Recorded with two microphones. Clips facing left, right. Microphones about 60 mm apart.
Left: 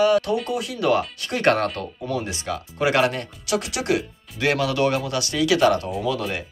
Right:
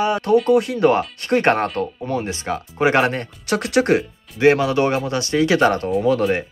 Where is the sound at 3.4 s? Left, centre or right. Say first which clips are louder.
Right 6 dB; right.